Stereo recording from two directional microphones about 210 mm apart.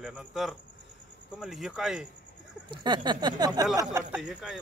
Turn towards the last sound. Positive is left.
turn(degrees=-5)  # may be behind; listen again after turning